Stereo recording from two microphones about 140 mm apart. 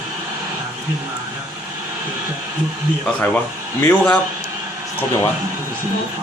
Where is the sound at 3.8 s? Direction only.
15° left (ahead or behind).